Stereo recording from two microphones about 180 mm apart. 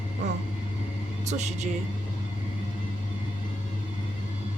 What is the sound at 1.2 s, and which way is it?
Speech, 40° right (ahead or behind).